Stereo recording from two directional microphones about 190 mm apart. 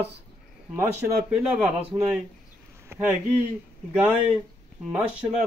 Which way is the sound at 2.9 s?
15° right (ahead or behind).